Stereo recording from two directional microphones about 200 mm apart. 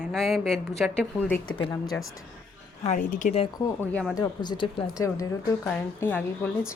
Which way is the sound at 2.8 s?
40° left (ahead or behind).